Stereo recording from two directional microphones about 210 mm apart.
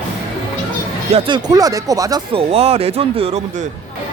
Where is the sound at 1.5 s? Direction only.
15° right (ahead or behind).